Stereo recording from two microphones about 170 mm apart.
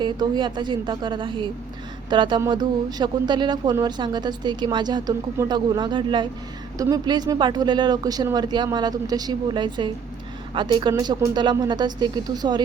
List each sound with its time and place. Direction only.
0.0 s speech: 30° right (ahead or behind)